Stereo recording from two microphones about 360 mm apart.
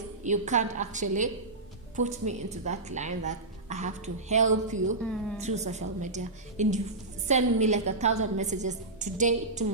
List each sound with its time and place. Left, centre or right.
0.2 s a woman's voice: centre